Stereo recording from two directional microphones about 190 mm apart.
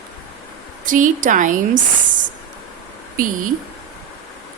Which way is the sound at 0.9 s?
45° right (ahead or behind).